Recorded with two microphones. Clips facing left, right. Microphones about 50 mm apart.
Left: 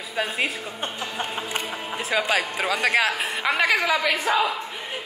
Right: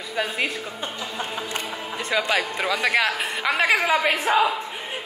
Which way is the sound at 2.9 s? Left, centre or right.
Centre.